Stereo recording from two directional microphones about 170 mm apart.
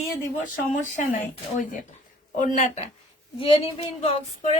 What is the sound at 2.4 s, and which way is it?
A woman's voice, 40° left (ahead or behind).